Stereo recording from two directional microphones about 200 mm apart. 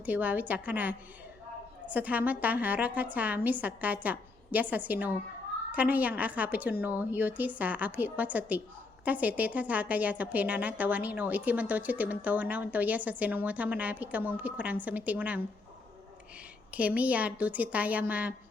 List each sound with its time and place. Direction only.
0.0 s a woman's voice: 10° right (ahead or behind)
16.7 s a woman's voice: 5° right (ahead or behind)